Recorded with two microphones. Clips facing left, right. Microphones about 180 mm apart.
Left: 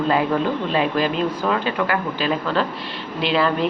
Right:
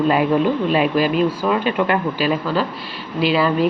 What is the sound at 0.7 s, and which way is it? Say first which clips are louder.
Speech: right 2 dB; 10° right (ahead or behind).